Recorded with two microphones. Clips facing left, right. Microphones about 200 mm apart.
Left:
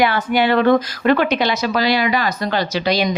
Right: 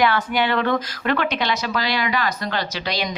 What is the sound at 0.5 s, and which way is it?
Speech, 40° left (ahead or behind).